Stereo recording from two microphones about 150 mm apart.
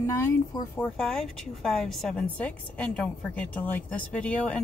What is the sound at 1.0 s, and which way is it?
Speech, 5° left (ahead or behind).